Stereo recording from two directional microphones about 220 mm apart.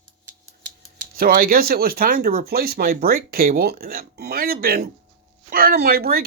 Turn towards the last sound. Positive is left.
turn(degrees=-45)  # may be behind; listen again after turning